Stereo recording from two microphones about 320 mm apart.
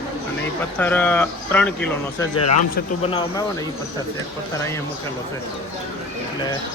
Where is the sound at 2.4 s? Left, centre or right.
Left.